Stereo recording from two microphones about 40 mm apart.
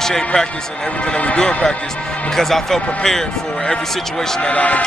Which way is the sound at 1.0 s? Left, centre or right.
Left.